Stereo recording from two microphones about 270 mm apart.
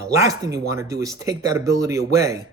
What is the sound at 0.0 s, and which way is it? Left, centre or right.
A man's voice, centre.